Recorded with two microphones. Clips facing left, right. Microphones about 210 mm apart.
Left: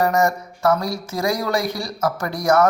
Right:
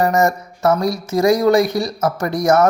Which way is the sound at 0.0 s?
20° right (ahead or behind).